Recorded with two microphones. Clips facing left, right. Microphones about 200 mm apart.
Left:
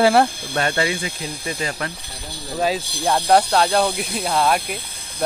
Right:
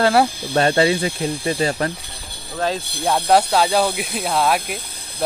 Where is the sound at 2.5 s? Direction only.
10° left (ahead or behind).